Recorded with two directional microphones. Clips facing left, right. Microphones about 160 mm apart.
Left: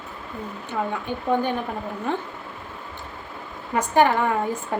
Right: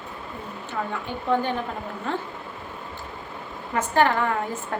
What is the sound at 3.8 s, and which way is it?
A woman's voice, 15° left (ahead or behind).